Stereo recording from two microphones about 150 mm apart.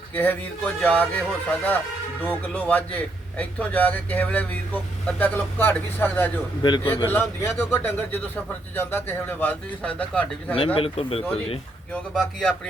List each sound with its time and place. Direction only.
0.1 s a man's voice: 10° left (ahead or behind)
6.6 s a man's voice: 30° left (ahead or behind)
6.8 s a man's voice: 15° left (ahead or behind)
10.8 s speech: 40° left (ahead or behind)
11.9 s speech: 5° left (ahead or behind)